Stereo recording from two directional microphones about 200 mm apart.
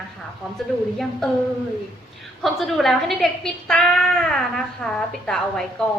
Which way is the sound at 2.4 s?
Centre (ahead or behind).